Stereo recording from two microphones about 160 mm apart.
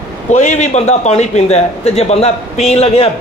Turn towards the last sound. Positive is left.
turn(degrees=40)  # may be behind; listen again after turning